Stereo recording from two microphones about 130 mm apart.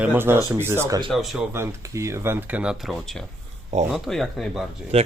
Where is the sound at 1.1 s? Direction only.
Centre (ahead or behind).